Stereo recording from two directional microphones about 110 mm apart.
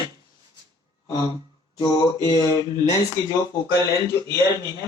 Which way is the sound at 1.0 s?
50° left (ahead or behind).